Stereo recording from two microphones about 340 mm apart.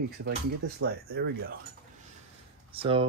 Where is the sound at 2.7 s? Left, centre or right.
Centre.